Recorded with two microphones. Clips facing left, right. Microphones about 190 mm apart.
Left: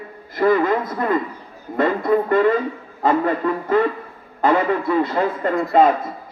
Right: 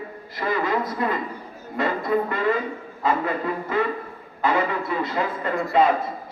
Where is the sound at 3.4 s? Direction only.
50° left (ahead or behind).